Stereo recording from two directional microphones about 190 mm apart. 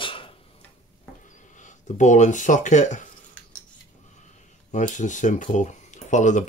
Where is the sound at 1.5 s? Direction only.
40° left (ahead or behind).